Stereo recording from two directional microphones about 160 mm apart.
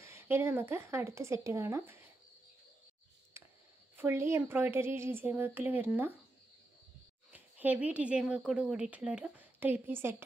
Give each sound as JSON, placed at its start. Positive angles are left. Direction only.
{"t": 0.0, "sound": "a woman's voice", "side_deg": -15}
{"t": 3.4, "sound": "a sound", "side_deg": -15}
{"t": 3.9, "sound": "a woman's voice", "side_deg": -15}
{"t": 7.3, "sound": "a woman's voice", "side_deg": -10}